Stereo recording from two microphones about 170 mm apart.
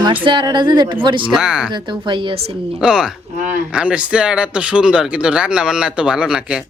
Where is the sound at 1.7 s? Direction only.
25° right (ahead or behind).